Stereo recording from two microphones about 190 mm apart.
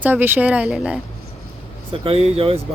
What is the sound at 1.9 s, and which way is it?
Speech, 30° right (ahead or behind).